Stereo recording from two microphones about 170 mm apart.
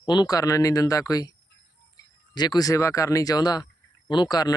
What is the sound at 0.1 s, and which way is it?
Speech, 25° left (ahead or behind).